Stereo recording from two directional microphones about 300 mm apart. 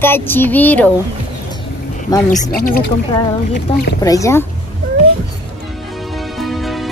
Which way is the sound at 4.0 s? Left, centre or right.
Centre.